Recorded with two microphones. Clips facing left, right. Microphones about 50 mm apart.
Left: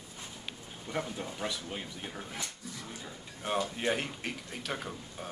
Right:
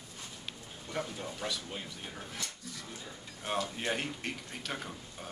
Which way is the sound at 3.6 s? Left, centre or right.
Centre.